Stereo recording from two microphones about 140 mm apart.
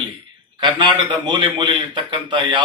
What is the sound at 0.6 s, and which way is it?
A man's voice, 35° right (ahead or behind).